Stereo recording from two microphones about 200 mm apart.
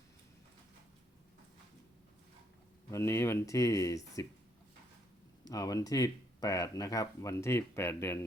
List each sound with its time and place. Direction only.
2.9 s speech: 15° left (ahead or behind)
5.5 s speech: 15° left (ahead or behind)